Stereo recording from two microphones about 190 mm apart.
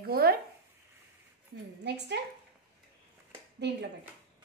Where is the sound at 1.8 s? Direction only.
65° right (ahead or behind).